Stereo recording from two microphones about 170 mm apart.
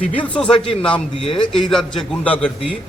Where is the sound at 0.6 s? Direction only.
30° left (ahead or behind).